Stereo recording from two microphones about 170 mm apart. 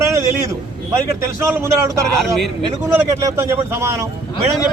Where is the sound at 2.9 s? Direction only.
15° right (ahead or behind).